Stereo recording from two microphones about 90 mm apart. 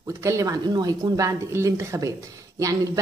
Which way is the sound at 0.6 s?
50° right (ahead or behind).